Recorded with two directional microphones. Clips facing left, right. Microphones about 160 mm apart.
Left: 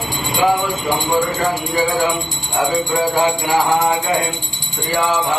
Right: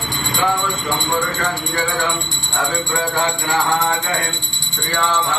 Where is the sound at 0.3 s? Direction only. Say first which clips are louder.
Left 4 dB; 20° left (ahead or behind).